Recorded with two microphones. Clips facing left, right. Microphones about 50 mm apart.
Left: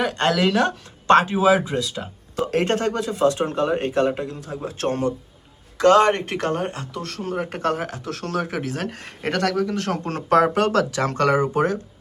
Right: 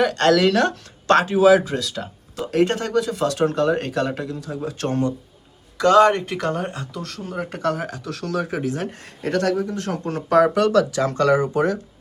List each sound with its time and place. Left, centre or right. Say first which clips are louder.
0.0 s speech: right 4 dB; centre
1.1 s speech: right 2 dB; left
2.4 s speech: even; left
3.2 s speech: even; centre
4.3 s speech: right 2 dB; left
9.6 s speech: left 2 dB; left
10.0 s speech: right 2 dB; left